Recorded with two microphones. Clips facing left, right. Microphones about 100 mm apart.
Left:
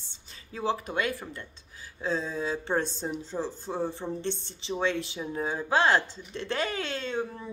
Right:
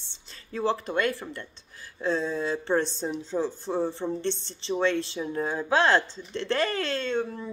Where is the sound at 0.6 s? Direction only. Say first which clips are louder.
Right 3 dB; 15° left (ahead or behind).